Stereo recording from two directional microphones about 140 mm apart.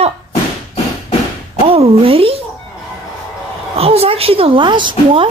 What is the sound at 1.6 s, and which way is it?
Speech, 40° right (ahead or behind).